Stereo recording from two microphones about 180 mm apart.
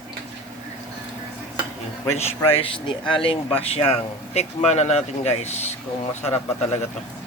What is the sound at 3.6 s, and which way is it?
Speech, 35° left (ahead or behind).